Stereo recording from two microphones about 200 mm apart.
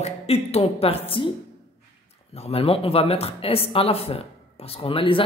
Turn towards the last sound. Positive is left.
turn(degrees=25)  # may be behind; listen again after turning